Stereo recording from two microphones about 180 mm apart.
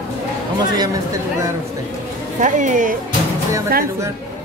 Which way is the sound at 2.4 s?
45° right (ahead or behind).